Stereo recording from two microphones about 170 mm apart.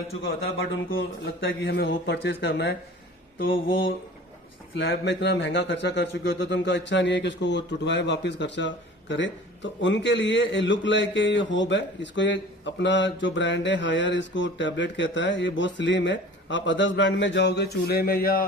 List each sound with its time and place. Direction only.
1.2 s speech: 80° left
3.3 s mantra: 60° left (ahead or behind)
4.7 s speech: 80° left; by 18.4 s 60° left (ahead or behind)